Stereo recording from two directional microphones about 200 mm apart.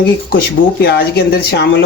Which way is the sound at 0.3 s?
55° left (ahead or behind).